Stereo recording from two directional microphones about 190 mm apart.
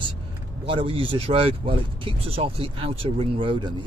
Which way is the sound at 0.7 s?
30° right (ahead or behind).